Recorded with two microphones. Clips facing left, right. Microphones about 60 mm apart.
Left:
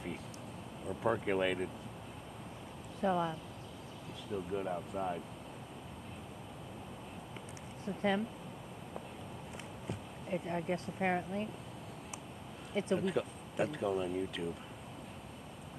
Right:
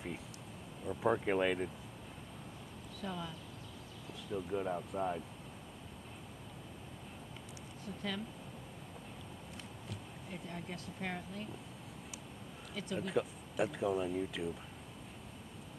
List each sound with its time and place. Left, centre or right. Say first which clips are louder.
0.8 s speech: right 1 dB; centre
3.0 s speech: left 10 dB; left
4.3 s speech: even; centre
7.8 s speech: left 8 dB; left
9.8 s speech: left 10 dB; left
12.7 s speech: left 7 dB; left
13.1 s speech: even; centre